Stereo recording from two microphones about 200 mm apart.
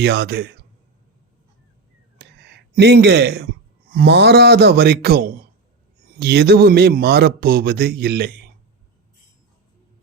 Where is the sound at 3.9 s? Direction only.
55° right (ahead or behind).